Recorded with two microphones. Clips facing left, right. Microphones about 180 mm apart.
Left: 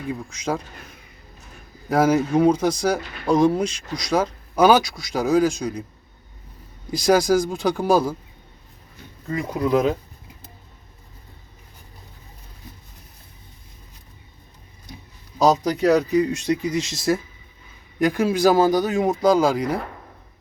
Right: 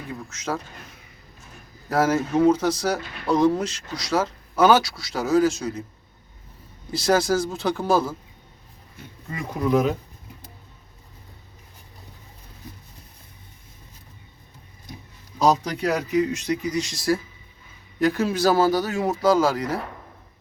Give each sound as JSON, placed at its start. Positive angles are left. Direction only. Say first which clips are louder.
{"t": 0.1, "sound": "speech", "louder": "left 3 dB", "side_deg": 15}
{"t": 1.9, "sound": "speech", "louder": "left 3 dB", "side_deg": 15}
{"t": 6.9, "sound": "speech", "louder": "left 3 dB", "side_deg": 15}
{"t": 15.4, "sound": "speech", "louder": "left 4 dB", "side_deg": 35}